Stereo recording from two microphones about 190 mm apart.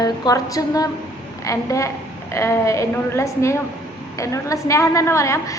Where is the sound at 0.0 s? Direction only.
20° left (ahead or behind).